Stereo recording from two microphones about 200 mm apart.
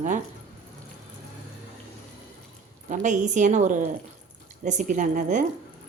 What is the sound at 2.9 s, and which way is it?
A woman's voice, 40° right (ahead or behind).